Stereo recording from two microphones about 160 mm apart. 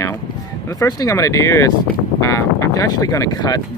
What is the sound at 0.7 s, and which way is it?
Speech, 20° left (ahead or behind).